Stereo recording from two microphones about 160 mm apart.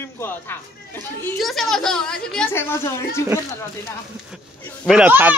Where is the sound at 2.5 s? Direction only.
15° left (ahead or behind).